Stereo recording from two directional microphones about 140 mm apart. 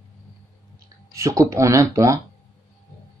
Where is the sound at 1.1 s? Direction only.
20° right (ahead or behind).